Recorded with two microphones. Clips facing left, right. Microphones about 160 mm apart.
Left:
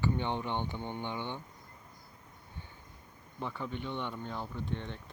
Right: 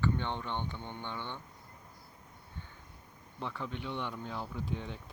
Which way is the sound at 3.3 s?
Centre (ahead or behind).